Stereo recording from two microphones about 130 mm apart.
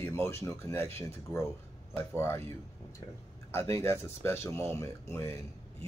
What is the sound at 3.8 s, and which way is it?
Speech, 20° left (ahead or behind).